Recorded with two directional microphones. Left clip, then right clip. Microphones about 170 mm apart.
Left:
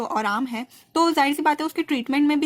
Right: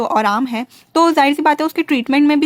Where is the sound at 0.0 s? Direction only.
25° right (ahead or behind).